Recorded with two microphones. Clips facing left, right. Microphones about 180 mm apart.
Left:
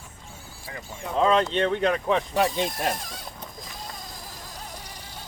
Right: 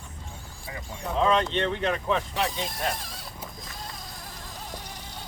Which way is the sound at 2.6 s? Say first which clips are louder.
Left 3 dB; centre (ahead or behind).